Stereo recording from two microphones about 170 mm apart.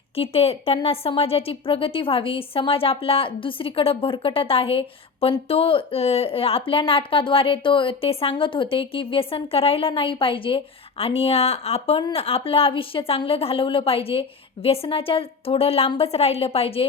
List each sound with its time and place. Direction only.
0.2 s a woman's voice: 35° left (ahead or behind)